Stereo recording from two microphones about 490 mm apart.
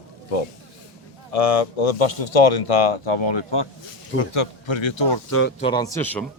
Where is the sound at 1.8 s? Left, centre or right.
Left.